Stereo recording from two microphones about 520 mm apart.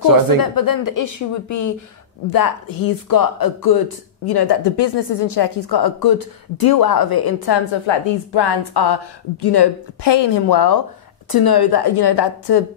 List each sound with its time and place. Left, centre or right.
0.4 s a woman's voice: left